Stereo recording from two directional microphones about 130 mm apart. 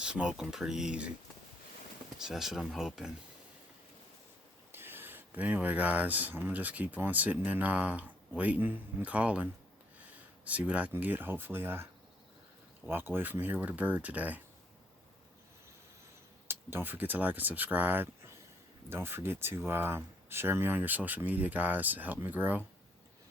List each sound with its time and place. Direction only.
0.0 s speech: 5° right (ahead or behind)
2.2 s speech: 5° right (ahead or behind)
4.7 s speech: 15° right (ahead or behind)
12.9 s speech: 15° right (ahead or behind)
16.5 s speech: 15° right (ahead or behind)